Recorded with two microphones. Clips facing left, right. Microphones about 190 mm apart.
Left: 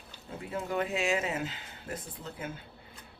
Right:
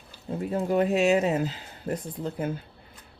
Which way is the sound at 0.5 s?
40° right (ahead or behind).